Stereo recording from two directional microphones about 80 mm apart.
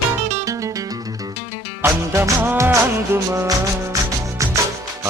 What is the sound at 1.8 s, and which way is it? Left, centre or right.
Music, right.